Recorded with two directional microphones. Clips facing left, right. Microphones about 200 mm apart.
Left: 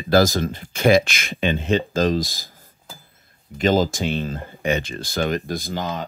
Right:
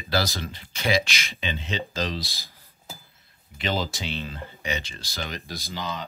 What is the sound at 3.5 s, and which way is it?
Speech, 45° left (ahead or behind).